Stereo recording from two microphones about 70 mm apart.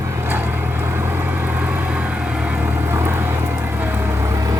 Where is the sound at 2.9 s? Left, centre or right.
Right.